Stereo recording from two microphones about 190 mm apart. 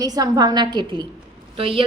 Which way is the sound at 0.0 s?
20° right (ahead or behind).